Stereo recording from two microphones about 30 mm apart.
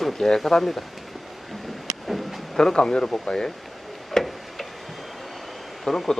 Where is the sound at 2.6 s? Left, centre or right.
Left.